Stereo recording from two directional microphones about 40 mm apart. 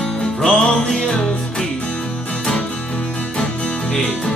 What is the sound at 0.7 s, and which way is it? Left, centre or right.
Music, left.